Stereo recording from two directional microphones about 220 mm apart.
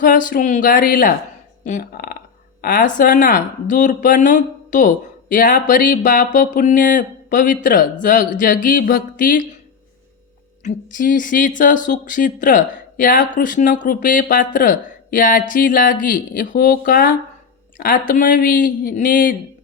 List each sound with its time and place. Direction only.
0.0 s speech: 40° left (ahead or behind)
10.6 s speech: 35° left (ahead or behind)